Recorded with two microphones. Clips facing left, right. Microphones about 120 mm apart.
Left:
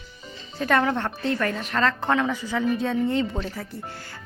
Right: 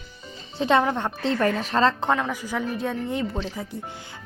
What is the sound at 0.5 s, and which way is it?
Speech, 25° right (ahead or behind).